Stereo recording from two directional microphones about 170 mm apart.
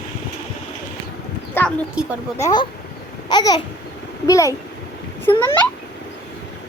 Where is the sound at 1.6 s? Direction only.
15° left (ahead or behind).